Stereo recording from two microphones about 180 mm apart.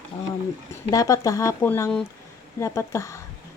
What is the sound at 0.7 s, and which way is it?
Speech, 20° left (ahead or behind).